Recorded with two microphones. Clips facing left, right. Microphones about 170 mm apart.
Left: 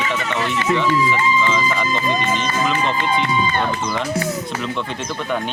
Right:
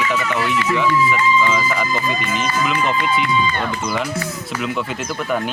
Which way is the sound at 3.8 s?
5° right (ahead or behind).